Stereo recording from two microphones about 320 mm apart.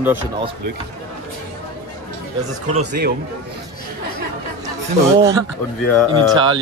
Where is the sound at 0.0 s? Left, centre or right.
Centre.